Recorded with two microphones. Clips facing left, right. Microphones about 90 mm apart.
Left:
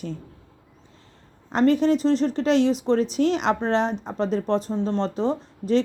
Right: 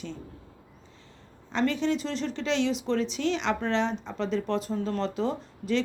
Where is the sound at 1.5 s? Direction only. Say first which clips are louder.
Left 7 dB; 45° left (ahead or behind).